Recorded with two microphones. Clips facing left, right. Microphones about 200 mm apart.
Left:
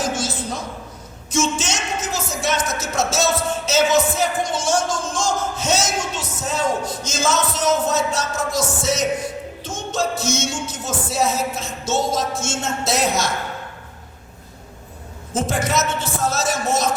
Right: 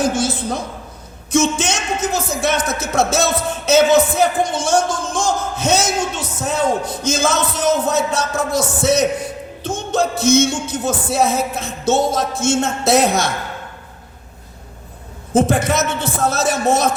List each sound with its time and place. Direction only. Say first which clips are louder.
0.0 s a sound: right 6 dB; 60° right (ahead or behind)
1.3 s speech: right 5 dB; 60° right (ahead or behind)
15.3 s speech: right 6 dB; 60° right (ahead or behind)